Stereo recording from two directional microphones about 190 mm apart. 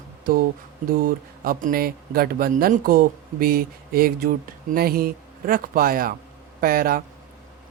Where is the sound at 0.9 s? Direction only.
50° right (ahead or behind).